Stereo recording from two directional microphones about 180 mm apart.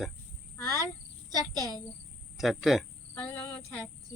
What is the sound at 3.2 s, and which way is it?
Speech, 10° left (ahead or behind).